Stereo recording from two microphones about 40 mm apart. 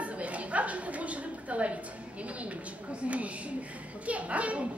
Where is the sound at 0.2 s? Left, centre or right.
Right.